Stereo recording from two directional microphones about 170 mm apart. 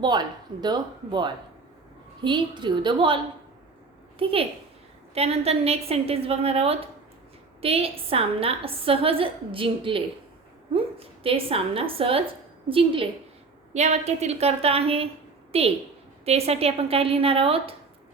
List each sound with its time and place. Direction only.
0.0 s speech: 25° right (ahead or behind)
4.2 s a woman's voice: 30° right (ahead or behind)
11.0 s a woman's voice: 35° right (ahead or behind)